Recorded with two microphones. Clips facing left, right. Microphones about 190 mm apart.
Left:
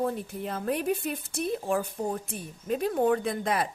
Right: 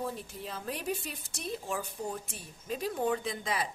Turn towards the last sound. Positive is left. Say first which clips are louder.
# left 6 dB
turn(degrees=55)  # may be behind; listen again after turning